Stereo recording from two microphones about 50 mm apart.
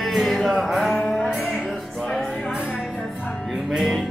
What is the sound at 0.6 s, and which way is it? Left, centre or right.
Music, centre.